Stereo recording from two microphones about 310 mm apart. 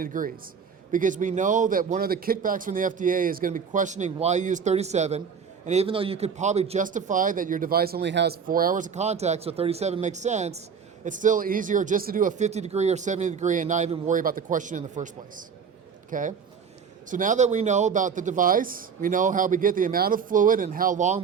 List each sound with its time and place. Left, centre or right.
0.0 s a man's voice: right